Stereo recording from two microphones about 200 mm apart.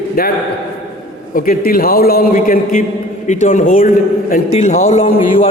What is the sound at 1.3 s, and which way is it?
A man's voice, 45° left (ahead or behind).